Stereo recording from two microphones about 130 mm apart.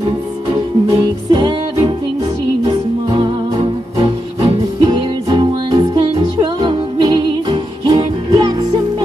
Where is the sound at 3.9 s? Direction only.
35° right (ahead or behind).